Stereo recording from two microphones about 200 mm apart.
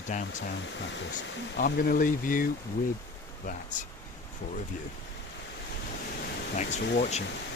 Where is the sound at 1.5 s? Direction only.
45° left (ahead or behind).